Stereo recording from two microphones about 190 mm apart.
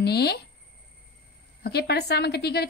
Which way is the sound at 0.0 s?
60° left (ahead or behind).